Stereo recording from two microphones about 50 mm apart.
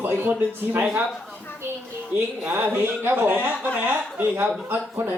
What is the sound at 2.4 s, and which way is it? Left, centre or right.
Speech, right.